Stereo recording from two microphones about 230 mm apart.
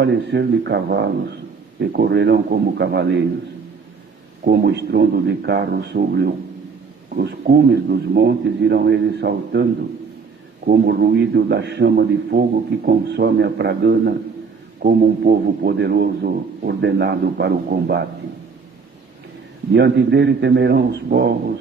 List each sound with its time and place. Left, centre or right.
0.0 s a man's voice: right
4.5 s a man's voice: right
19.7 s a man's voice: right